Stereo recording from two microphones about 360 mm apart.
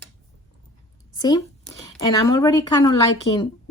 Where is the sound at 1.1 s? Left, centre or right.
Centre.